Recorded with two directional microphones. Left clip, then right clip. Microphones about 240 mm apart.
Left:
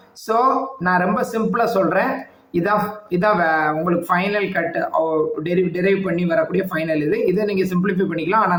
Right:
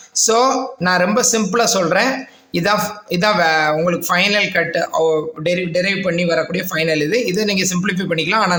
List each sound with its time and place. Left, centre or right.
0.3 s speech: right